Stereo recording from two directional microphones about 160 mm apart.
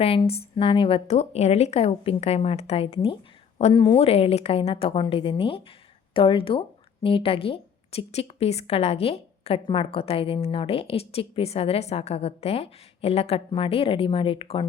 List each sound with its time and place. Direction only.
0.0 s a woman's voice: 35° left (ahead or behind)